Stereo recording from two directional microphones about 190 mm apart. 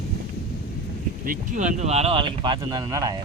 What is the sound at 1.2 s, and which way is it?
Speech, 45° right (ahead or behind).